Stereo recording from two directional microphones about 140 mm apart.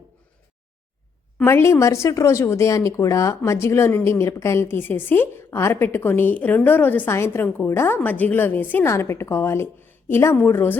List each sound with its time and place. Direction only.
1.5 s speech: 20° left (ahead or behind)